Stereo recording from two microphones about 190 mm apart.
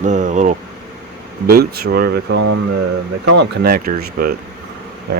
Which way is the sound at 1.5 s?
55° right (ahead or behind).